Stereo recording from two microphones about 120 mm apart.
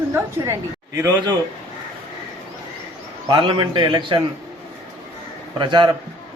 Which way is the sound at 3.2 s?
40° right (ahead or behind).